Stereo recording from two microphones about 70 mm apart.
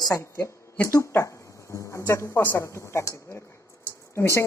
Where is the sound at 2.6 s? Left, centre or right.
Left.